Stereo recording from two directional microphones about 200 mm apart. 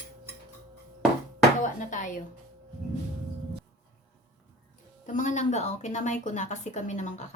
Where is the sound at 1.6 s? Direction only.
40° left (ahead or behind).